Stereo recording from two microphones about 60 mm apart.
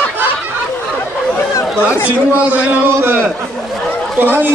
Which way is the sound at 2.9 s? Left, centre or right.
Right.